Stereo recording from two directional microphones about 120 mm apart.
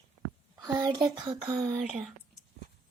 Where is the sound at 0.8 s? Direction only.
35° right (ahead or behind).